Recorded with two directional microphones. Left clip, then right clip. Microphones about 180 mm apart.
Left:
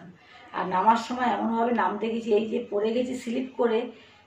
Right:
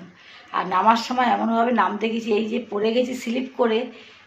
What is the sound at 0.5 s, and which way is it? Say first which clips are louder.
Speech: right 4 dB; 25° right (ahead or behind).